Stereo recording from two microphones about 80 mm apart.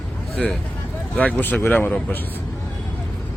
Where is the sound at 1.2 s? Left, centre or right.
Centre.